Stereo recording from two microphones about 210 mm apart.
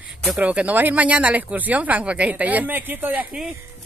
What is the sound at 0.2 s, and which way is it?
Speech, 5° right (ahead or behind).